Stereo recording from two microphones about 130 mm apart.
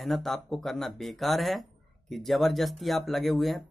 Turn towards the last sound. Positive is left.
turn(degrees=0)  # may be behind; listen again after turning